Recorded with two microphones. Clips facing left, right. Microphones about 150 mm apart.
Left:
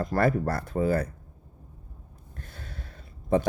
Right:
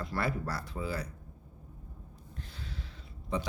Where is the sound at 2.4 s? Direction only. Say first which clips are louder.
Left 2 dB; 50° left (ahead or behind).